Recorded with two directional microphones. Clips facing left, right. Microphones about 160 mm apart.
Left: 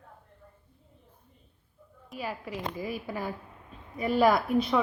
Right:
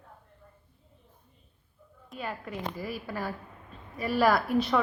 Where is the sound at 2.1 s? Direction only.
5° left (ahead or behind).